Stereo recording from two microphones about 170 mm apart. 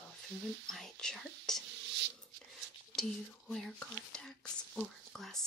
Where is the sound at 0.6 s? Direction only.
Centre (ahead or behind).